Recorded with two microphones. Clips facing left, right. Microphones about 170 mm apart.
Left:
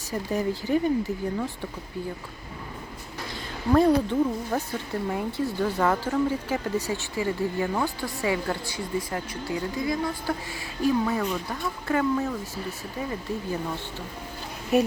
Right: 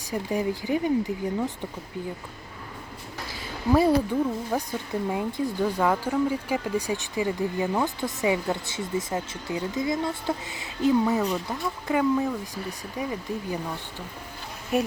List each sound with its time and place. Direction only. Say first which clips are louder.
0.1 s speech: even; 15° right (ahead or behind)
3.7 s speech: left 1 dB; 5° right (ahead or behind)
14.7 s speech: left 3 dB; centre (ahead or behind)